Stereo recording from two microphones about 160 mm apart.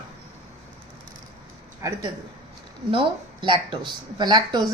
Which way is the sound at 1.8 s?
15° right (ahead or behind).